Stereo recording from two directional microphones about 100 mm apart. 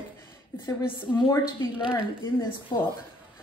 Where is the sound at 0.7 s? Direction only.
50° left (ahead or behind).